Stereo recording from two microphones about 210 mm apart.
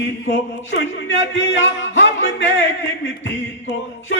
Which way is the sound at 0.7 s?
60° left (ahead or behind).